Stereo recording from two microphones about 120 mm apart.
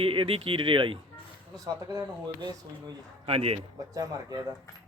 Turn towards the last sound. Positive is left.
turn(degrees=-30)  # may be behind; listen again after turning